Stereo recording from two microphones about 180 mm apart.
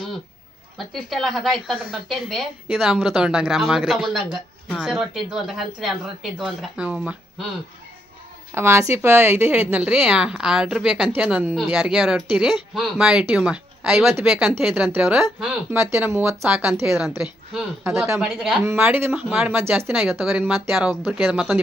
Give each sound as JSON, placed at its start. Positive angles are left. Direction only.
{"t": 0.8, "sound": "a woman's voice", "side_deg": 0}
{"t": 8.5, "sound": "a woman's voice", "side_deg": -15}
{"t": 17.8, "sound": "speech", "side_deg": -15}
{"t": 18.2, "sound": "speech", "side_deg": -5}
{"t": 20.0, "sound": "a woman's voice", "side_deg": 0}